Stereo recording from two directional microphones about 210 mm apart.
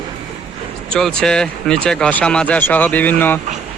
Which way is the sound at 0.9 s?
5° left (ahead or behind).